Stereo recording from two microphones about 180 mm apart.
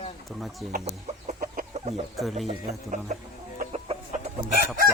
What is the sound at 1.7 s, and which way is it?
Chicken, 40° right (ahead or behind).